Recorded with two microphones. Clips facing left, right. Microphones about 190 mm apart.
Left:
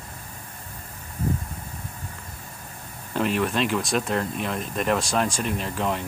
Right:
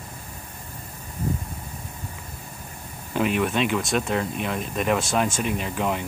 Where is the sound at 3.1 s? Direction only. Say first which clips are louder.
Right 1 dB; 5° right (ahead or behind).